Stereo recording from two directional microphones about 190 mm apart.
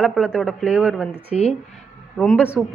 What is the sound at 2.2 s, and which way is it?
Speech, centre (ahead or behind).